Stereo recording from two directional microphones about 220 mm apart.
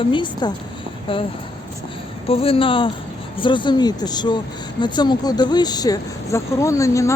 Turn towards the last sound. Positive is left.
turn(degrees=15)  # may be behind; listen again after turning